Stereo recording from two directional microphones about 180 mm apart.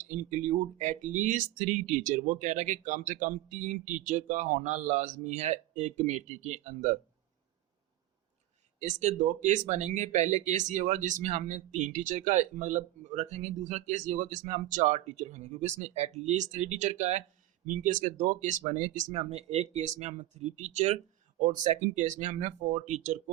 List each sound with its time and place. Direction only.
0.0 s speech: 45° right (ahead or behind)
8.8 s speech: 40° right (ahead or behind)